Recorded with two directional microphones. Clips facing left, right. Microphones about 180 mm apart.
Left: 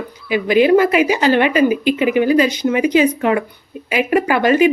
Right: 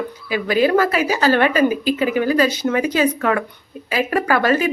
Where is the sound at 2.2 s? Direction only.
15° left (ahead or behind).